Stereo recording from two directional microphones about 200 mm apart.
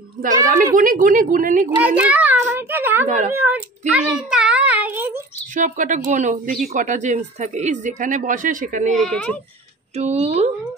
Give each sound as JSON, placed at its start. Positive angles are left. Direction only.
{"t": 0.7, "sound": "a woman's voice", "side_deg": -45}
{"t": 1.8, "sound": "a sound", "side_deg": -5}
{"t": 5.5, "sound": "speech", "side_deg": -40}
{"t": 8.9, "sound": "speech", "side_deg": 5}
{"t": 9.9, "sound": "speech", "side_deg": -30}